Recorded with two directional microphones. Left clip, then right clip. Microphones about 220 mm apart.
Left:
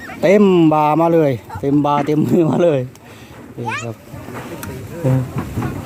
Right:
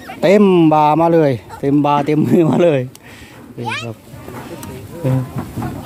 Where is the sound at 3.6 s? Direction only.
60° right (ahead or behind).